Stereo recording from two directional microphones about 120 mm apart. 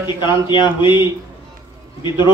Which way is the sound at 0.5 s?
40° left (ahead or behind).